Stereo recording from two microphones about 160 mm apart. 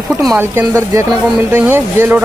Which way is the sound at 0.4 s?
15° right (ahead or behind).